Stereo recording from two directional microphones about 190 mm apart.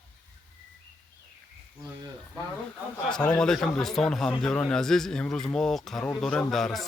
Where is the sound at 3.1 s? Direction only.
5° left (ahead or behind).